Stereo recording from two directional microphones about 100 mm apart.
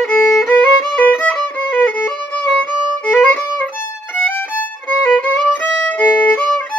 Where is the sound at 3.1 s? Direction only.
20° left (ahead or behind).